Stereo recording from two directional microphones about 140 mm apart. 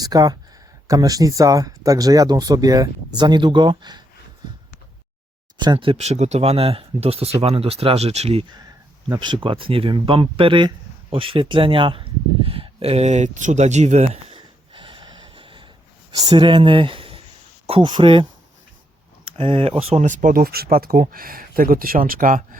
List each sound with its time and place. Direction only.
0.0 s speech: 25° right (ahead or behind)
4.4 s a sound: 30° right (ahead or behind)
5.5 s speech: 35° right (ahead or behind)
9.0 s speech: 35° right (ahead or behind)
11.1 s a sound: 40° right (ahead or behind)
16.1 s speech: 30° right (ahead or behind)
19.4 s speech: 40° right (ahead or behind); by 22.4 s 80° right